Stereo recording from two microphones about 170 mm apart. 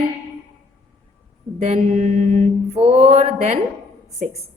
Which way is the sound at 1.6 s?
40° right (ahead or behind).